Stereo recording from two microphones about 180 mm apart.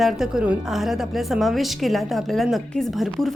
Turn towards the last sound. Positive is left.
turn(degrees=0)  # may be behind; listen again after turning